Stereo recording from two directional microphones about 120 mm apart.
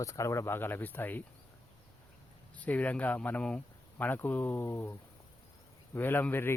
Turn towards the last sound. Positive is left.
turn(degrees=20)  # may be behind; listen again after turning